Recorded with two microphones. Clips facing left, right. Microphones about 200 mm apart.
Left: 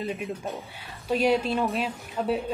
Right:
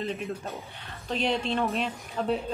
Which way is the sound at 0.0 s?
10° left (ahead or behind).